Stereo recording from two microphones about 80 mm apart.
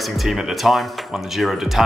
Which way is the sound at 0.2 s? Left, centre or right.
Centre.